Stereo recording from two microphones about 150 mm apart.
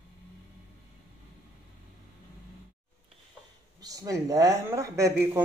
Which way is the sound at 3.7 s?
25° right (ahead or behind).